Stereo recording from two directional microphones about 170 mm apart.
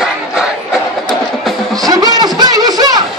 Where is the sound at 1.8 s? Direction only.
20° right (ahead or behind).